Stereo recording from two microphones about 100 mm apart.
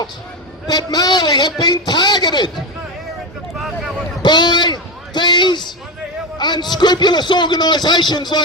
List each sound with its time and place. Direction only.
0.7 s a man's voice: 40° left (ahead or behind)
4.2 s a sound: 45° left (ahead or behind)
6.4 s a man's voice: 45° left (ahead or behind)